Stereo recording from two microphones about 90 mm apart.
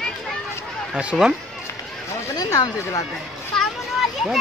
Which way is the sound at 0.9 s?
10° right (ahead or behind).